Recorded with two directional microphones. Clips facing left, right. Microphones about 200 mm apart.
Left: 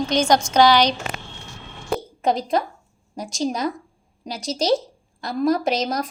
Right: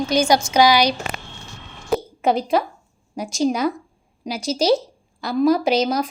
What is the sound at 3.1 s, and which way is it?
A woman's voice, 5° right (ahead or behind).